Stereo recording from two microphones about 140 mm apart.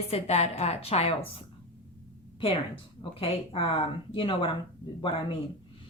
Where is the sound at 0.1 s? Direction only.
50° left (ahead or behind).